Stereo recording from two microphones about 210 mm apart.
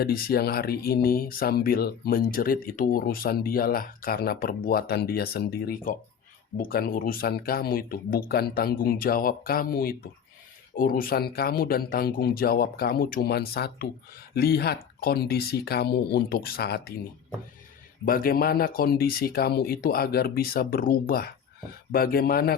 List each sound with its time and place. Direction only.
0.0 s speech: 45° left (ahead or behind)
18.0 s speech: 45° left (ahead or behind)